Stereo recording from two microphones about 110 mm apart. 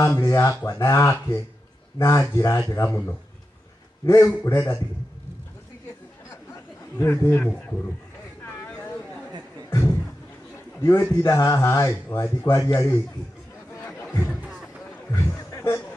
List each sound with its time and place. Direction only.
0.0 s speech: 30° left (ahead or behind)
7.0 s speech: 20° left (ahead or behind)
9.7 s music: 25° left (ahead or behind)
10.8 s speech: 20° left (ahead or behind)
13.8 s a sound: 25° left (ahead or behind)
15.0 s speech: 25° left (ahead or behind)